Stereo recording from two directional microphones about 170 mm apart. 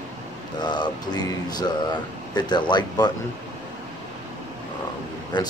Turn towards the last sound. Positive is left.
turn(degrees=25)  # may be behind; listen again after turning